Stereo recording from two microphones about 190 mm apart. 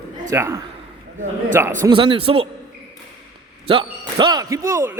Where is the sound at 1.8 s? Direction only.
25° right (ahead or behind).